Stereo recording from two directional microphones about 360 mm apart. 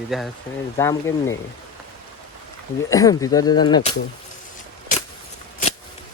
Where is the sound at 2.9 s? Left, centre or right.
Centre.